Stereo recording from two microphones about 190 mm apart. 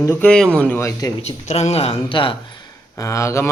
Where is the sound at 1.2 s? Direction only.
35° left (ahead or behind).